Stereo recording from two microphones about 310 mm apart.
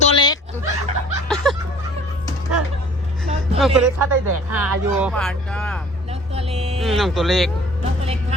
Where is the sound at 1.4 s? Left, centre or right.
Centre.